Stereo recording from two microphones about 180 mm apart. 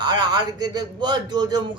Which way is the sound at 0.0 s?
25° right (ahead or behind).